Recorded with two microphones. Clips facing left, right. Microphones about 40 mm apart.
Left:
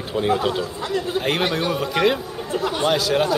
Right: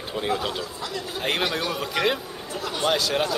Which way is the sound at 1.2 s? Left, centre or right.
Centre.